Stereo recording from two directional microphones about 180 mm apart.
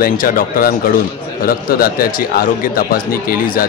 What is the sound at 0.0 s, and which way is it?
Speech, 50° left (ahead or behind).